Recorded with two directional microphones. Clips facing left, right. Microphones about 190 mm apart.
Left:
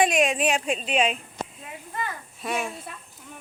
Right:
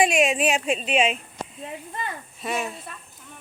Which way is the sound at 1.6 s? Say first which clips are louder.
Right 3 dB; 25° right (ahead or behind).